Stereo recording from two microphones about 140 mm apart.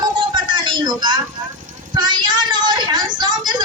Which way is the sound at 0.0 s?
30° right (ahead or behind).